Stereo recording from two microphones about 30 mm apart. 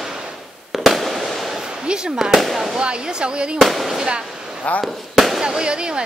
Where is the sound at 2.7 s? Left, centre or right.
Right.